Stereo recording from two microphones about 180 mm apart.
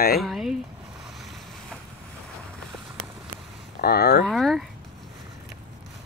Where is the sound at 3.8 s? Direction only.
60° left (ahead or behind).